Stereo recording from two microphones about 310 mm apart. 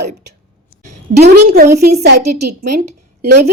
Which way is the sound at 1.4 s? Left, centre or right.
Right.